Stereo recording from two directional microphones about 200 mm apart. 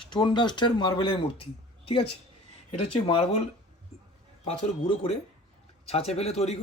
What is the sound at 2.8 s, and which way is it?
Speech, 30° left (ahead or behind).